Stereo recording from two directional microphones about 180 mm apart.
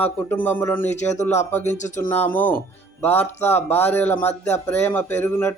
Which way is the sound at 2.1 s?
10° left (ahead or behind).